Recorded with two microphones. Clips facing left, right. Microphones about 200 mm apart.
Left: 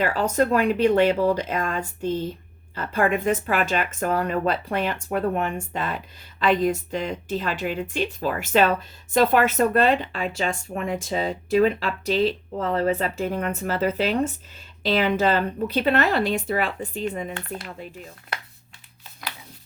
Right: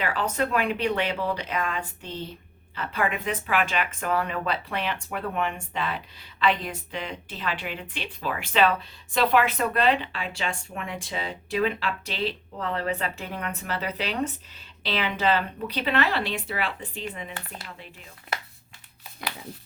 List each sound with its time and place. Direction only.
0.0 s speech: 40° left (ahead or behind)